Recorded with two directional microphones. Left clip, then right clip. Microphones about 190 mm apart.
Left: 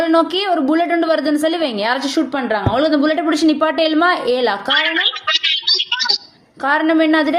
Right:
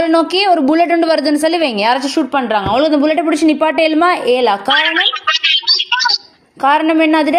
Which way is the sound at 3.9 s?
30° right (ahead or behind).